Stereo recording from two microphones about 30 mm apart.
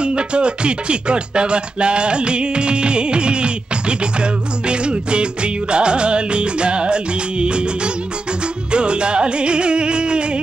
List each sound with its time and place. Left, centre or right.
0.0 s music: right